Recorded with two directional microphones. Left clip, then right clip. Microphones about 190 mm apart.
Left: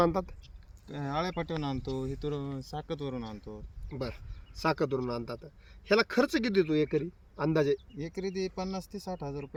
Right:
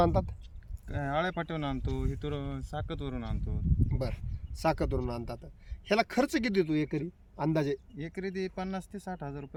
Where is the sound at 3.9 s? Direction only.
40° right (ahead or behind).